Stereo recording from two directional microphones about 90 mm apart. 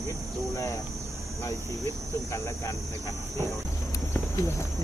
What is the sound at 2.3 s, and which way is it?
Speech, 35° left (ahead or behind).